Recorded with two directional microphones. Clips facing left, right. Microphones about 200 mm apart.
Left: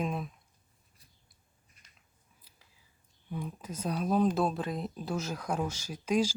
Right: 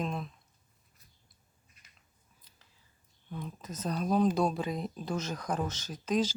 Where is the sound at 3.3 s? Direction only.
10° left (ahead or behind).